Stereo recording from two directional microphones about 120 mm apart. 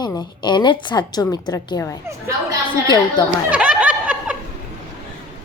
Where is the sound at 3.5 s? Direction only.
10° right (ahead or behind).